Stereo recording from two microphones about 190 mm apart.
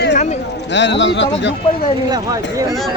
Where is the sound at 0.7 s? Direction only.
70° left (ahead or behind).